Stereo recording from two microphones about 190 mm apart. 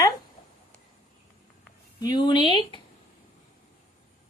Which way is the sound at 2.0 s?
25° left (ahead or behind).